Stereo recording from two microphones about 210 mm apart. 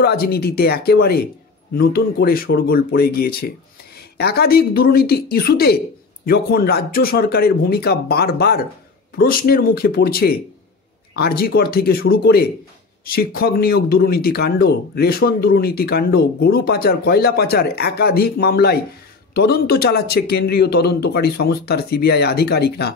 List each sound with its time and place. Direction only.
0.0 s speech: 50° left (ahead or behind)